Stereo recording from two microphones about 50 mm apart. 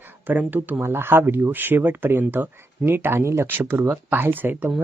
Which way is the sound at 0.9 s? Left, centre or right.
Right.